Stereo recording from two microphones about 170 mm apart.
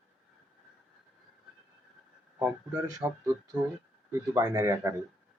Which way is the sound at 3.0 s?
25° right (ahead or behind).